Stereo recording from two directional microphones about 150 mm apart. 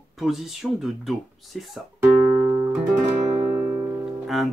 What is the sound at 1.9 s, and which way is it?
Music, 20° right (ahead or behind).